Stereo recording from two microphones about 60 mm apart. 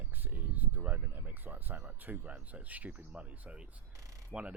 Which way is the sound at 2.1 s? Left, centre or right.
Right.